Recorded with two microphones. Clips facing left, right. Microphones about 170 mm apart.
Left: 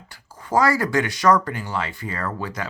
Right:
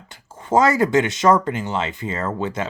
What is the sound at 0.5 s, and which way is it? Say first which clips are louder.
Speech: right 4 dB; 20° right (ahead or behind).